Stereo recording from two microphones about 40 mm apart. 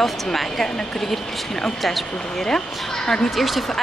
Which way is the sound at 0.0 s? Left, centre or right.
Centre.